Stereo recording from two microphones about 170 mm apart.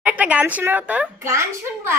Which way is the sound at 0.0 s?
10° right (ahead or behind).